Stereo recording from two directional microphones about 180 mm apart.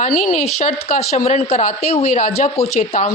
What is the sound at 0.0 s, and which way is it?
Speech, 45° left (ahead or behind).